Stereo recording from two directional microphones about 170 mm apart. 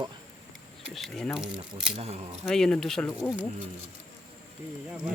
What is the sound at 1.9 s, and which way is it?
Speech, 40° right (ahead or behind).